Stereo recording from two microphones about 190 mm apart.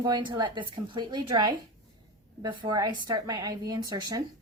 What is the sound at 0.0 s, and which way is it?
A woman's voice, 25° right (ahead or behind).